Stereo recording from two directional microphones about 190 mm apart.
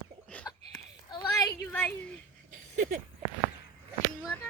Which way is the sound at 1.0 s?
20° left (ahead or behind).